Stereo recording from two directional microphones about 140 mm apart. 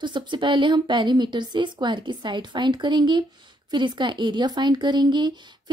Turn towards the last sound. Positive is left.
turn(degrees=-35)  # may be behind; listen again after turning